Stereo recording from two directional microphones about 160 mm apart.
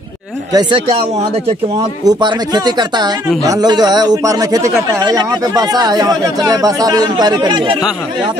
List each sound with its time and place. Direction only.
0.5 s speech: 25° right (ahead or behind)
2.0 s speech: 25° right (ahead or behind)